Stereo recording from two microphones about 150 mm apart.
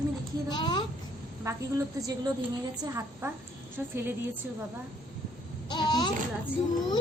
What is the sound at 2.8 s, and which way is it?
A woman's voice, 15° right (ahead or behind).